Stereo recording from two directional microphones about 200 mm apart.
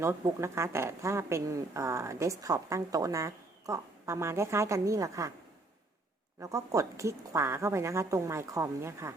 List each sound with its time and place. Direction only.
0.0 s a woman's voice: 15° right (ahead or behind)
6.4 s a woman's voice: 15° right (ahead or behind)